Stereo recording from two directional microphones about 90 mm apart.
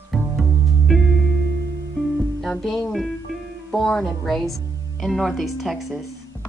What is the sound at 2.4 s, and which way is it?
Speech, centre (ahead or behind).